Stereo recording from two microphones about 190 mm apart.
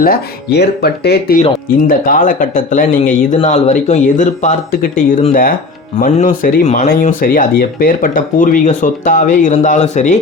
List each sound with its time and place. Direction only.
0.0 s speech: 55° left (ahead or behind)
1.9 s speech: 45° left (ahead or behind)